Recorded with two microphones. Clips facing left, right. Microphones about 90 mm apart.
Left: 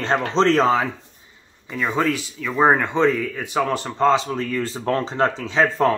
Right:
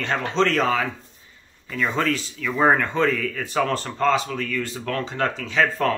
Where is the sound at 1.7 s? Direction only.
10° left (ahead or behind).